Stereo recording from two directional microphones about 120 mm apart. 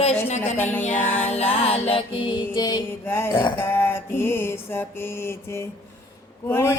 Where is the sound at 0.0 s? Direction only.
70° left (ahead or behind).